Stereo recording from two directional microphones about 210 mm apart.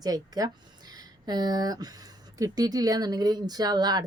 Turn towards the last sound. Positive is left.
turn(degrees=-20)  # may be behind; listen again after turning